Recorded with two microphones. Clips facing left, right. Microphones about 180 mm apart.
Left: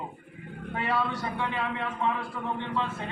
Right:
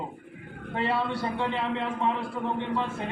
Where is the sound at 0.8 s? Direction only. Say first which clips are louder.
Right 2 dB; 30° right (ahead or behind).